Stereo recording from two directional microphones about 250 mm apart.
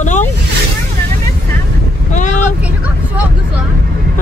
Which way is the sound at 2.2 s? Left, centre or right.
Left.